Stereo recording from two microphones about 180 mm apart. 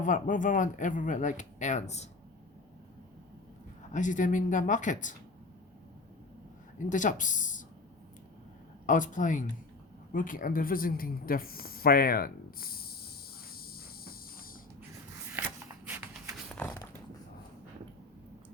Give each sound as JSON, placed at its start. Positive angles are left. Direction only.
{"t": 0.0, "sound": "speech", "side_deg": 45}
{"t": 3.9, "sound": "speech", "side_deg": 45}
{"t": 6.7, "sound": "speech", "side_deg": 45}
{"t": 8.9, "sound": "speech", "side_deg": 45}
{"t": 13.5, "sound": "insect", "side_deg": 55}
{"t": 15.9, "sound": "shuffle", "side_deg": -10}
{"t": 16.6, "sound": "a sound", "side_deg": 10}